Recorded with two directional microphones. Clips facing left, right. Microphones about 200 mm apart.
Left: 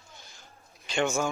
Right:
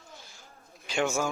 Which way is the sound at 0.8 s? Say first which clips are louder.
Left 1 dB; 5° right (ahead or behind).